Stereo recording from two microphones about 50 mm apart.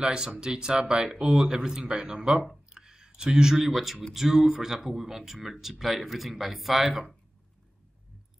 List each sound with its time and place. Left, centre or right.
0.0 s speech: centre
3.5 s speech: centre